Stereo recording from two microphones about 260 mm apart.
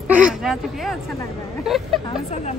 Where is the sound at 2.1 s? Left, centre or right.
Left.